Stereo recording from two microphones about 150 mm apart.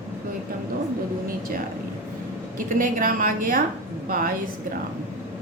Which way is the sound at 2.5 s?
65° right (ahead or behind).